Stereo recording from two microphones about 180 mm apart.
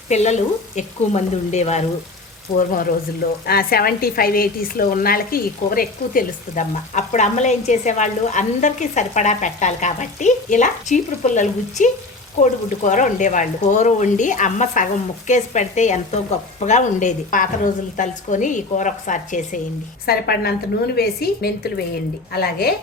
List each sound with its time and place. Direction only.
0.1 s speech: 40° left (ahead or behind)
2.6 s a woman's voice: 55° left (ahead or behind)
20.1 s a woman's voice: 60° left (ahead or behind)